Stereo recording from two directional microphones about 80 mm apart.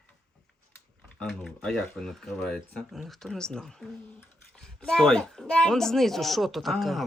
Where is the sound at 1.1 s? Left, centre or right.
Centre.